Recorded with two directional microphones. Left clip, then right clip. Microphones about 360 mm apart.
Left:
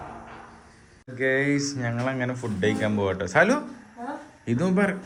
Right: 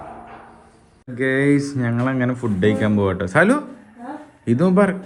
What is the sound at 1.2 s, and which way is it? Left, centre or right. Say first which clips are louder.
Speech: right 5 dB; right.